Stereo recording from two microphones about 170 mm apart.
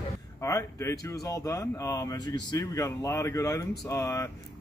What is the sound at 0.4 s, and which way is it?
Speech, 15° left (ahead or behind).